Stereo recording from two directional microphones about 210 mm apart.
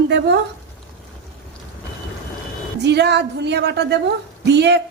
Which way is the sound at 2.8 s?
55° right (ahead or behind).